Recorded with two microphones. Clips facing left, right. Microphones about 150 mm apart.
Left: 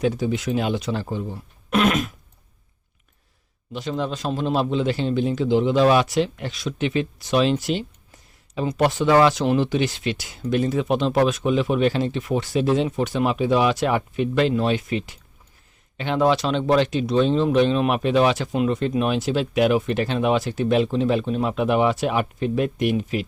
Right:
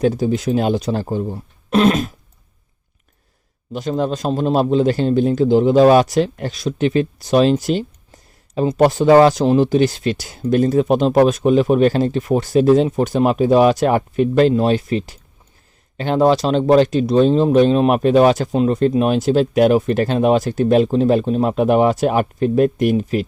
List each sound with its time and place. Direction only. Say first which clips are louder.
0.0 s speech: right 5 dB; 40° right (ahead or behind)
3.7 s speech: right 6 dB; 45° right (ahead or behind)